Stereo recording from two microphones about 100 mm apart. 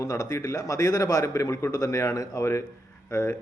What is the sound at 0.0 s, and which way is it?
A man's voice, 35° left (ahead or behind).